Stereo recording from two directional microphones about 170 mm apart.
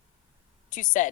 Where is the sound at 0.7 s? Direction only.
50° left (ahead or behind).